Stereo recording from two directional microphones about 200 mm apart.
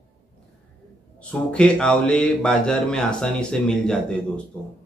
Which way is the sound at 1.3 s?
5° left (ahead or behind).